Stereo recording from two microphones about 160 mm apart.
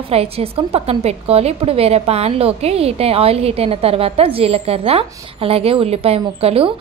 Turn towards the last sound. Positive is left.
turn(degrees=-40)  # may be behind; listen again after turning